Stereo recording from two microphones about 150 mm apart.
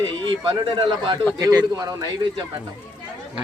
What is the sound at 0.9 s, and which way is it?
A man's voice, 30° right (ahead or behind).